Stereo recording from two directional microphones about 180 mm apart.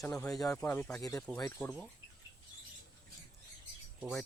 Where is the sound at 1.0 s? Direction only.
20° left (ahead or behind).